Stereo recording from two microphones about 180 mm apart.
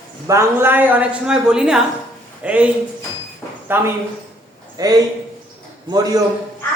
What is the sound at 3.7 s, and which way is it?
A woman's voice, 10° right (ahead or behind).